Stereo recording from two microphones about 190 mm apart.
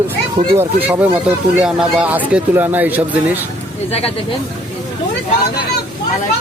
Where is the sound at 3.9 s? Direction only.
30° left (ahead or behind).